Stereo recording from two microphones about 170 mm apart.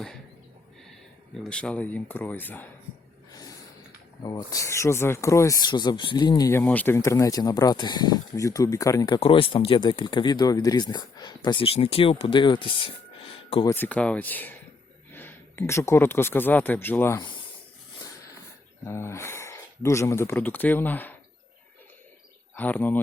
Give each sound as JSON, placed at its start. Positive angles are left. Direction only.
{"t": 1.5, "sound": "speech", "side_deg": 5}
{"t": 4.2, "sound": "speech", "side_deg": 20}
{"t": 13.3, "sound": "a sound", "side_deg": 35}
{"t": 13.7, "sound": "speech", "side_deg": 10}
{"t": 18.9, "sound": "speech", "side_deg": 15}
{"t": 22.5, "sound": "speech", "side_deg": 10}